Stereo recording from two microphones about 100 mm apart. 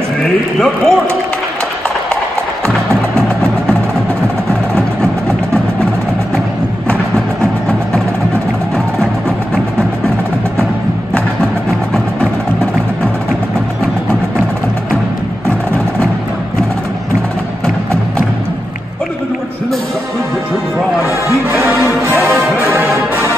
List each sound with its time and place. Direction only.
0.2 s a man's voice: 5° left (ahead or behind)
4.7 s a sound: 5° left (ahead or behind)
22.3 s music: 25° right (ahead or behind)